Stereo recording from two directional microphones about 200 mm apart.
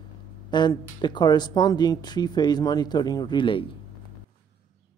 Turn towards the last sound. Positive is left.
turn(degrees=25)  # may be behind; listen again after turning